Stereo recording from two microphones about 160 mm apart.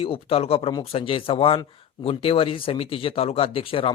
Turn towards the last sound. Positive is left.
turn(degrees=35)  # may be behind; listen again after turning